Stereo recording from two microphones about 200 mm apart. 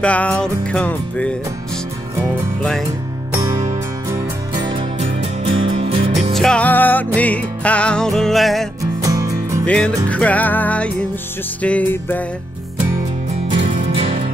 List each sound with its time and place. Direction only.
0.0 s music: 5° left (ahead or behind)
3.3 s music: 15° right (ahead or behind)
4.9 s music: 30° right (ahead or behind)
6.3 s music: 5° left (ahead or behind)
9.0 s music: 15° right (ahead or behind)
9.7 s music: 5° left (ahead or behind)
13.7 s music: 35° right (ahead or behind)